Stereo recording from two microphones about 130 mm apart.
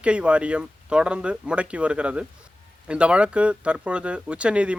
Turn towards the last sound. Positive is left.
turn(degrees=-10)  # may be behind; listen again after turning